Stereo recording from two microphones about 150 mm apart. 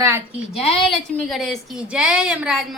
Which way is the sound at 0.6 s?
40° left (ahead or behind).